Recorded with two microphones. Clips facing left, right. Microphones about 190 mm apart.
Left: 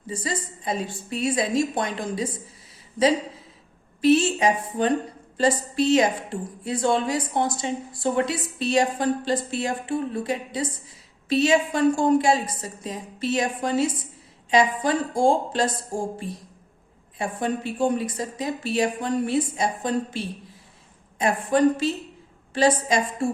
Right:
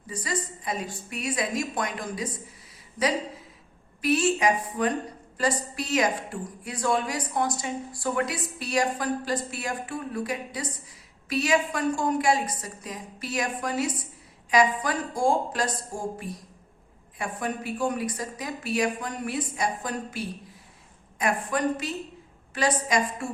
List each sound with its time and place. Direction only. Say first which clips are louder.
0.1 s a woman's voice: left 2 dB; 25° left (ahead or behind)
4.0 s a woman's voice: left 4 dB; 25° left (ahead or behind)